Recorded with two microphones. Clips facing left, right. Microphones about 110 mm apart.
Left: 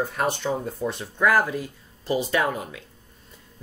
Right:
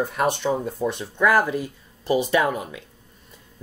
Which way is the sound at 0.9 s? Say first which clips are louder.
Right 1 dB; 15° right (ahead or behind).